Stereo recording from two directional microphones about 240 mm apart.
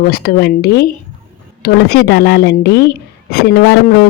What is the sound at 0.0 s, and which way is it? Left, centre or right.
Speech, left.